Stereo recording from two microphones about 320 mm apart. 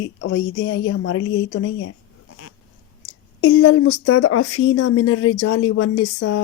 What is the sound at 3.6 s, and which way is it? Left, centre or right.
Speech, left.